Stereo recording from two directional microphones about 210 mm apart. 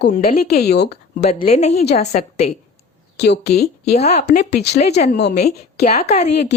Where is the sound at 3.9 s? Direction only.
30° left (ahead or behind).